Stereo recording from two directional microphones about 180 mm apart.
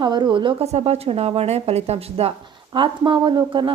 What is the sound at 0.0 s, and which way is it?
A woman's voice, 25° right (ahead or behind).